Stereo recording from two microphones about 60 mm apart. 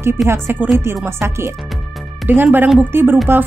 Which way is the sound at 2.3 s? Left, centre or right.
Right.